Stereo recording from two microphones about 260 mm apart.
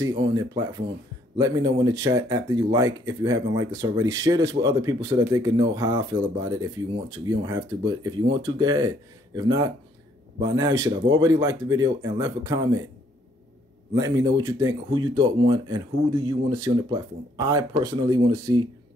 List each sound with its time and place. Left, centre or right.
0.0 s speech: centre
13.9 s speech: centre